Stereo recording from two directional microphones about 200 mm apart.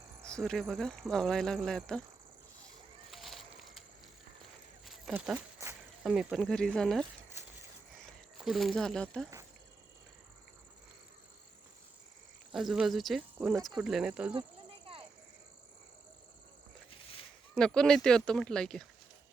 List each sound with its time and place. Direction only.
0.3 s speech: 5° left (ahead or behind)
3.1 s a sound: centre (ahead or behind)
4.9 s speech: 5° right (ahead or behind)
8.4 s speech: centre (ahead or behind)
12.5 s speech: 5° right (ahead or behind)
16.9 s a sound: 25° left (ahead or behind)
17.5 s speech: 5° left (ahead or behind)